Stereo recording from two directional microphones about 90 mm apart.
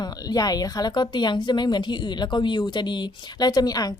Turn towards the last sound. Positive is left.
turn(degrees=45)  # may be behind; listen again after turning